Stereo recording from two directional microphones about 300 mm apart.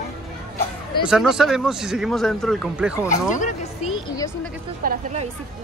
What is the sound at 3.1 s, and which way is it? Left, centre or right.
Speech, left.